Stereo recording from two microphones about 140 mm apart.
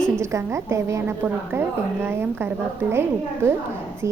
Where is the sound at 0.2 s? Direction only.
20° right (ahead or behind).